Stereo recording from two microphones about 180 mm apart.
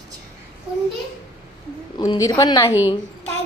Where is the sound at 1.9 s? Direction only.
20° left (ahead or behind).